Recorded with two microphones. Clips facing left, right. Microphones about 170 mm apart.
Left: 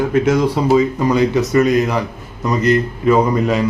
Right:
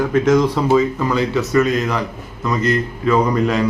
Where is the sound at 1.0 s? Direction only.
20° left (ahead or behind).